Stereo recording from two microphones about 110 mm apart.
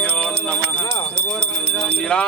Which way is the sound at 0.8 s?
25° left (ahead or behind).